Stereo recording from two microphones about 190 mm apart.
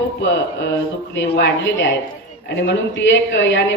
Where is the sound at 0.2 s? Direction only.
75° left (ahead or behind).